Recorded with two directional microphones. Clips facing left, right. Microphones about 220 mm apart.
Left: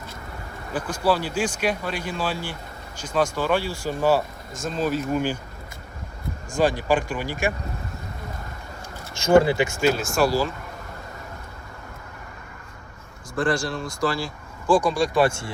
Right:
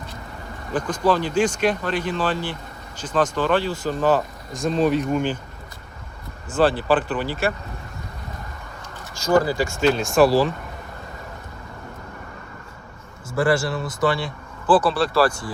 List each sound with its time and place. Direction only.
0.7 s speech: 10° left (ahead or behind)
6.5 s speech: 10° left (ahead or behind)
9.1 s speech: 25° left (ahead or behind)
9.7 s speech: centre (ahead or behind)
13.3 s speech: 5° right (ahead or behind)
14.7 s speech: 15° left (ahead or behind)